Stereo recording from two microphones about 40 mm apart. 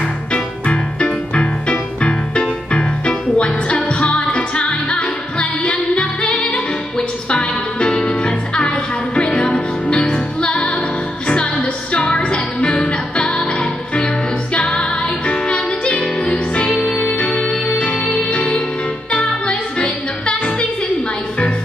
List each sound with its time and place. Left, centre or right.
0.3 s music: left
15.9 s music: left